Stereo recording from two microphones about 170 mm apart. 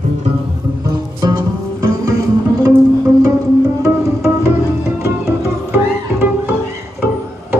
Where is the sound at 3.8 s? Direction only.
15° right (ahead or behind).